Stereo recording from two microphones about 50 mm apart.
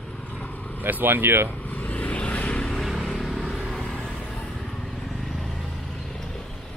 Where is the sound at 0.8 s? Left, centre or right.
Right.